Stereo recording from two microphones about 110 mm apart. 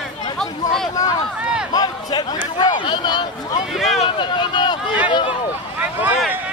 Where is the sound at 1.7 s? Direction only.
40° left (ahead or behind).